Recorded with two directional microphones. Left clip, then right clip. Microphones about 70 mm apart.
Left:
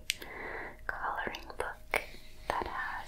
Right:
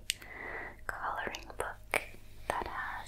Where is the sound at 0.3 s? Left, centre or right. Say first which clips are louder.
Left 1 dB; right.